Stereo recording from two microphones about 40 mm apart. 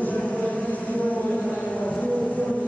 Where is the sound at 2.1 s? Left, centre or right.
Centre.